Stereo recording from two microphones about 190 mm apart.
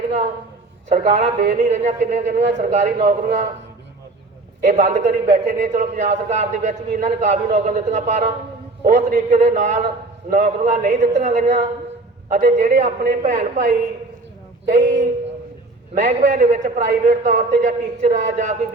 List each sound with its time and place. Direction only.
0.9 s a man's voice: 35° right (ahead or behind)
4.6 s a man's voice: 40° right (ahead or behind)